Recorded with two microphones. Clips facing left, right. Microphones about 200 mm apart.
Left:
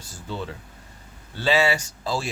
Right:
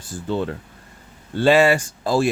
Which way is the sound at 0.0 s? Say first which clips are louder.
Right 9 dB; 55° right (ahead or behind).